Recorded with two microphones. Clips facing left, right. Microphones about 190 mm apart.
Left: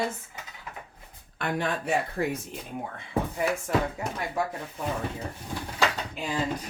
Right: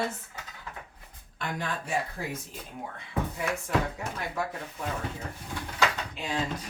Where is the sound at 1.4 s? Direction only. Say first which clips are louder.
Left 5 dB; 65° left (ahead or behind).